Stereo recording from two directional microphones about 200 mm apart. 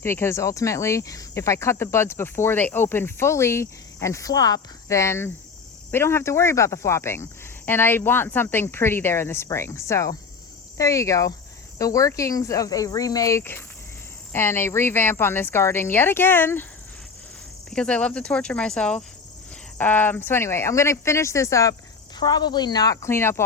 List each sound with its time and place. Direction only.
0.0 s speech: 10° left (ahead or behind)
17.7 s speech: 5° left (ahead or behind)